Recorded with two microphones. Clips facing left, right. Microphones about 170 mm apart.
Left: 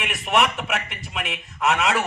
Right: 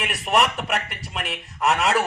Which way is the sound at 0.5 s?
Centre (ahead or behind).